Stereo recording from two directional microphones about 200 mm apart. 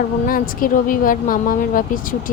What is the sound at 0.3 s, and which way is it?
A woman's voice, 45° left (ahead or behind).